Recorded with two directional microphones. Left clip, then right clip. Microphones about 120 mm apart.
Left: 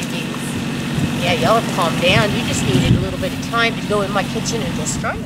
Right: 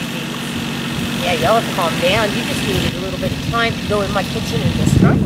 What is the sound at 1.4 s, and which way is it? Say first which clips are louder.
Speech: right 1 dB; 15° left (ahead or behind).